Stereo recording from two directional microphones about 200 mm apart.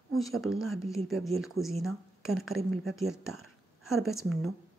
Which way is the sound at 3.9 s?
Centre (ahead or behind).